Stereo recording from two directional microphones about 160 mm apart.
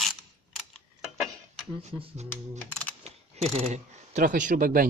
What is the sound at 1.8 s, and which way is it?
Speech, 45° right (ahead or behind).